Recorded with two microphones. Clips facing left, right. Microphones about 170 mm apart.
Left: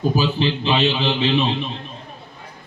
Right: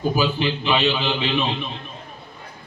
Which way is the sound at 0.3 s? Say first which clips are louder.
Left 2 dB; 25° left (ahead or behind).